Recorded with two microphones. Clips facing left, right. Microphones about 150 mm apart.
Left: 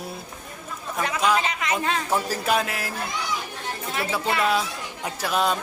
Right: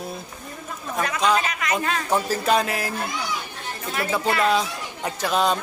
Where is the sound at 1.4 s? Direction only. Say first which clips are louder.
Even; 25° left (ahead or behind).